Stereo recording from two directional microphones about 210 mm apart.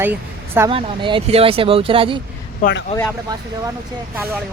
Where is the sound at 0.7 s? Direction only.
25° right (ahead or behind).